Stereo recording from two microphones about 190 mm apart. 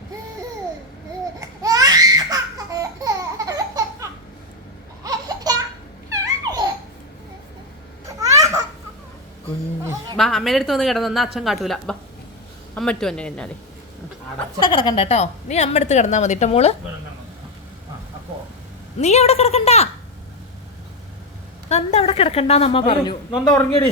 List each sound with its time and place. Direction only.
1.4 s laughter: 20° right (ahead or behind)
6.1 s babbling: 15° right (ahead or behind)
8.2 s babbling: 15° right (ahead or behind)
10.2 s a woman's voice: centre (ahead or behind)
14.6 s a woman's voice: 25° left (ahead or behind)
18.9 s a woman's voice: 35° left (ahead or behind)
21.7 s a woman's voice: 35° left (ahead or behind)
23.5 s a man's voice: 20° left (ahead or behind)